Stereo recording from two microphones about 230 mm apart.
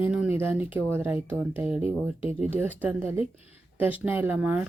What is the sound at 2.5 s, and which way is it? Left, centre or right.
Speech, centre.